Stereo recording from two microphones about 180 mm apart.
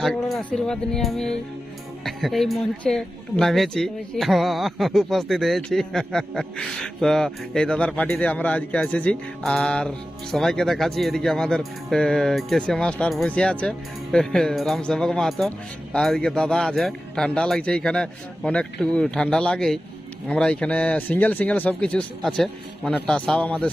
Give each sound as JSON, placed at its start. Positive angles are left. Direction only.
{"t": 0.0, "sound": "speech", "side_deg": 0}